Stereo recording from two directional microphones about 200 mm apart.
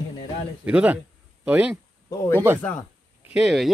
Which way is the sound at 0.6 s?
5° right (ahead or behind).